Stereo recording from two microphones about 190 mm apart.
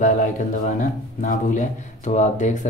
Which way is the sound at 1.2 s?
40° left (ahead or behind).